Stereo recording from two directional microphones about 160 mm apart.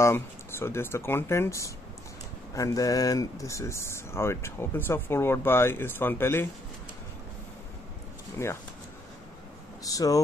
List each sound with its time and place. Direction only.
0.0 s speech: 15° left (ahead or behind)
8.4 s speech: 15° left (ahead or behind)
9.8 s speech: 20° left (ahead or behind)